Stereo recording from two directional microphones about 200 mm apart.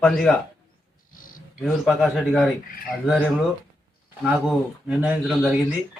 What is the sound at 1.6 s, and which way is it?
Speech, centre (ahead or behind).